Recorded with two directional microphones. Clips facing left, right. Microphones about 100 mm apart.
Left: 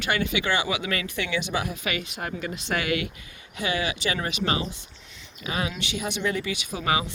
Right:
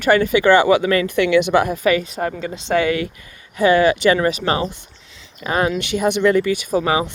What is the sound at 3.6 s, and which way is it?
Speech, 50° right (ahead or behind).